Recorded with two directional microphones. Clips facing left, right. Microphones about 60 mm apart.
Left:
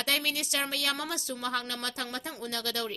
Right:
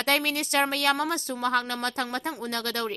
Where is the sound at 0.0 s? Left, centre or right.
Right.